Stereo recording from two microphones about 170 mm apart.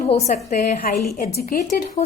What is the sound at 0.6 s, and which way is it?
A woman's voice, 55° left (ahead or behind).